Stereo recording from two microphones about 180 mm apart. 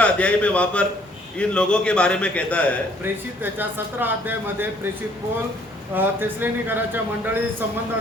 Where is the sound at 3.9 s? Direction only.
10° right (ahead or behind).